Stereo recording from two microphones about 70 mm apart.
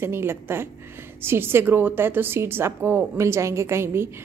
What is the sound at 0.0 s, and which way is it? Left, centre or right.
A woman's voice, right.